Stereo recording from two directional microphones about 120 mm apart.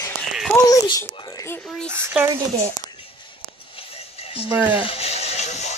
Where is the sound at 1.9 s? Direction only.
20° right (ahead or behind).